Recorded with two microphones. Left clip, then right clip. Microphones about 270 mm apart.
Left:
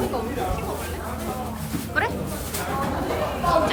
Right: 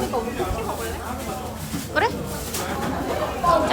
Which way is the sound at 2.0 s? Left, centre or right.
Centre.